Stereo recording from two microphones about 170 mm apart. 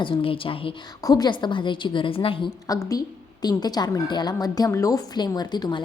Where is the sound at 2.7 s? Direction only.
20° left (ahead or behind).